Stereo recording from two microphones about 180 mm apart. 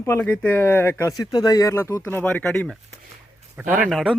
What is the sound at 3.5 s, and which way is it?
Speech, 5° right (ahead or behind).